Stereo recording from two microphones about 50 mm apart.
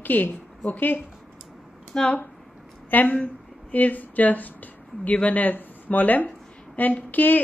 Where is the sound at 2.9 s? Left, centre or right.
Left.